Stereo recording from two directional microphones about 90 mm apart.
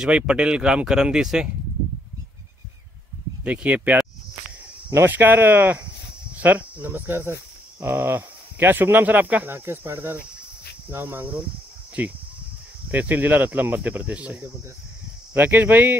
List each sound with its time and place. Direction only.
0.0 s speech: 10° right (ahead or behind)
3.4 s speech: 15° right (ahead or behind)